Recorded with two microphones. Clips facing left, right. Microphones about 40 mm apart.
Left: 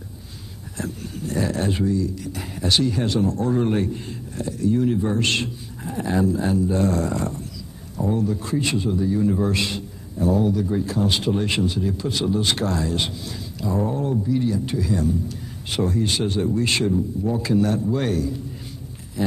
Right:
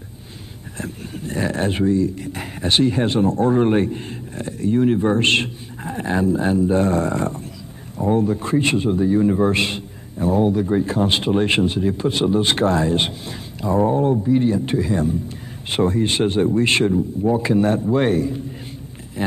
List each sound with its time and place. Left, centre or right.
0.7 s a man's voice: right